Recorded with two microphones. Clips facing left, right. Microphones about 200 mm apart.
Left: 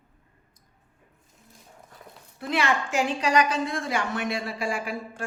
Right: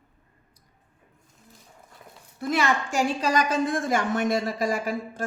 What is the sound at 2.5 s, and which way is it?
A woman's voice, 40° right (ahead or behind).